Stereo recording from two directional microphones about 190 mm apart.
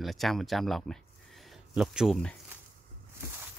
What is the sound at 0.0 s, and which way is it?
Speech, centre (ahead or behind).